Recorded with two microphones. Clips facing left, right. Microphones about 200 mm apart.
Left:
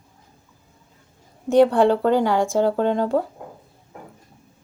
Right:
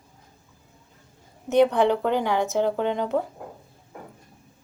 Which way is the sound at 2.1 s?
10° left (ahead or behind).